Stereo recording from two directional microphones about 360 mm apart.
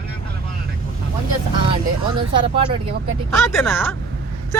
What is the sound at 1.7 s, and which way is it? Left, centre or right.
Speech, centre.